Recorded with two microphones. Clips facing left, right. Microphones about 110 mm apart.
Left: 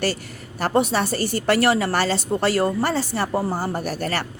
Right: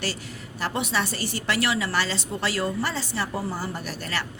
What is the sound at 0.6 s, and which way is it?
Speech, 40° left (ahead or behind).